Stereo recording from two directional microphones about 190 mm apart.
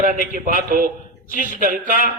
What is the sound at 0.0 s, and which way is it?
A man's voice, 45° right (ahead or behind).